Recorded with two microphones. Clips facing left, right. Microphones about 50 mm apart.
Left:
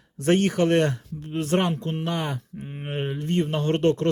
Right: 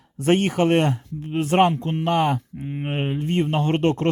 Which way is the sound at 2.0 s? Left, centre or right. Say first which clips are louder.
Right 10 dB; right.